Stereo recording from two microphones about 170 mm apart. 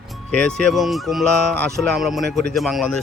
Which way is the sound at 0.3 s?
5° left (ahead or behind).